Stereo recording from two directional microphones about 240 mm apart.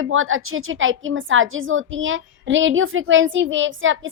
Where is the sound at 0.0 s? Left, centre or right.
Right.